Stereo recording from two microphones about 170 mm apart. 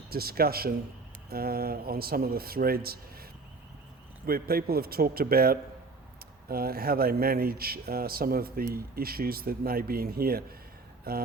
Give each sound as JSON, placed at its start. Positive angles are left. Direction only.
{"t": 0.1, "sound": "speech", "side_deg": -60}
{"t": 4.3, "sound": "speech", "side_deg": -65}